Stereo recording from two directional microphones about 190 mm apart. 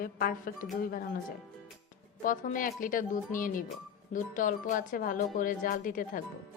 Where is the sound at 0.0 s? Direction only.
50° left (ahead or behind).